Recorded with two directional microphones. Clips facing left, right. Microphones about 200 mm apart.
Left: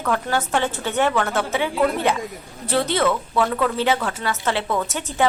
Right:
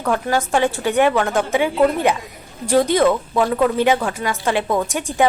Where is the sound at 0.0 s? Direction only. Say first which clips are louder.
Right 3 dB; 15° right (ahead or behind).